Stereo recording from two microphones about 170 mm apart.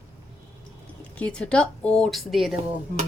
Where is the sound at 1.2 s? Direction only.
5° left (ahead or behind).